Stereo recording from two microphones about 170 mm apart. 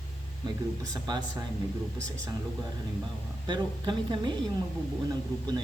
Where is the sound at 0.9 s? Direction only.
25° right (ahead or behind).